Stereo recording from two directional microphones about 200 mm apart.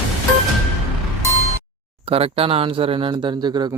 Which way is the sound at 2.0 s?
30° right (ahead or behind).